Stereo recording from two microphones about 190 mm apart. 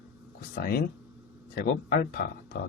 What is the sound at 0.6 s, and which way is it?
A man's voice, 50° left (ahead or behind).